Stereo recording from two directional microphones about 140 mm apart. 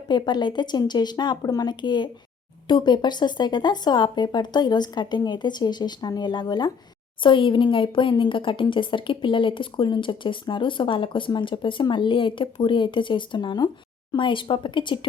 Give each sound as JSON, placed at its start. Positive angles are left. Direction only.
{"t": 0.1, "sound": "speech", "side_deg": 30}